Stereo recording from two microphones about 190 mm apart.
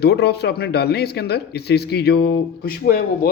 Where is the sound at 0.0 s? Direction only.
60° left (ahead or behind).